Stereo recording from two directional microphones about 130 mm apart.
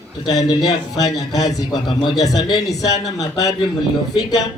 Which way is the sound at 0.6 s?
30° left (ahead or behind).